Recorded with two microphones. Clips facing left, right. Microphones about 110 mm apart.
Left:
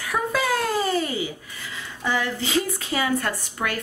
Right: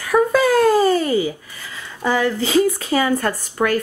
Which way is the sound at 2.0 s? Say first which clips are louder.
Right 7 dB; 40° right (ahead or behind).